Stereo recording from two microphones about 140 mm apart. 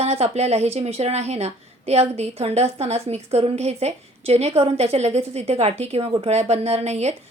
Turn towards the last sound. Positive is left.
turn(degrees=-50)  # may be behind; listen again after turning